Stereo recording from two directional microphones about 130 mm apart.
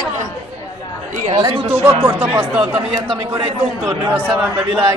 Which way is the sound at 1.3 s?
35° right (ahead or behind).